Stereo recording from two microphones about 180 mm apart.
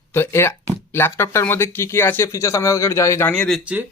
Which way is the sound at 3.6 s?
10° right (ahead or behind).